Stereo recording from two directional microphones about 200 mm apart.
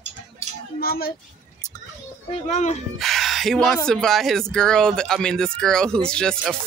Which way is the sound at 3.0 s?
Centre (ahead or behind).